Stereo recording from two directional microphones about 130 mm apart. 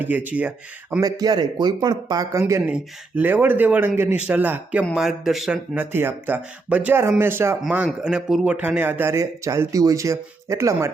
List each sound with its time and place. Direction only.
0.0 s speech: 15° right (ahead or behind)
1.0 s speech: 30° right (ahead or behind)
2.4 s speech: 15° right (ahead or behind)
5.7 s speech: 15° right (ahead or behind)
8.0 s speech: 5° right (ahead or behind)